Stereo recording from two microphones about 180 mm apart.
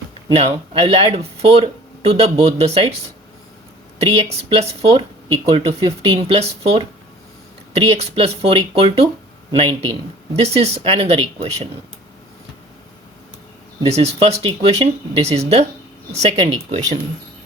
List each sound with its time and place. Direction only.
0.3 s speech: 35° right (ahead or behind)
4.0 s a man's voice: 35° right (ahead or behind)
13.8 s speech: 35° right (ahead or behind)